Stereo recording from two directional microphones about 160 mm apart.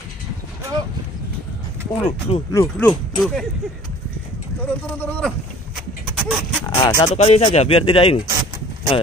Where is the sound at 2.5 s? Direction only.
20° left (ahead or behind).